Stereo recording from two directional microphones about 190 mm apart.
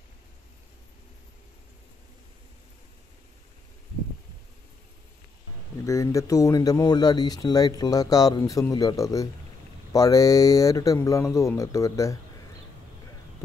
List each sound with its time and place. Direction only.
5.9 s speech: 15° left (ahead or behind)